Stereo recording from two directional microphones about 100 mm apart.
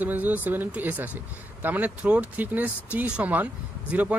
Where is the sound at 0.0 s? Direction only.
15° right (ahead or behind).